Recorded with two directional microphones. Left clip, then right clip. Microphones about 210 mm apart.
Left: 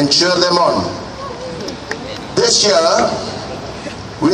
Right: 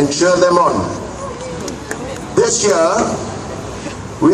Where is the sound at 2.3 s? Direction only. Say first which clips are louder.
Left 1 dB; 35° left (ahead or behind).